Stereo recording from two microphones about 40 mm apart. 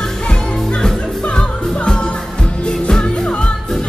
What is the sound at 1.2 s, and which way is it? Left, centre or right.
Music, left.